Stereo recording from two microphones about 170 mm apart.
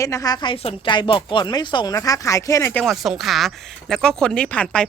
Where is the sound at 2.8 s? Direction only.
Centre (ahead or behind).